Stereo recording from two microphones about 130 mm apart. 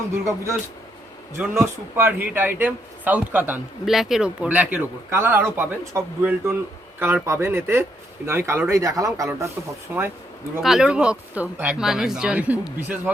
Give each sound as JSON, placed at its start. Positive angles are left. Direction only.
{"t": 0.1, "sound": "speech", "side_deg": -25}
{"t": 1.5, "sound": "a man's voice", "side_deg": -15}
{"t": 10.6, "sound": "a man's voice", "side_deg": -5}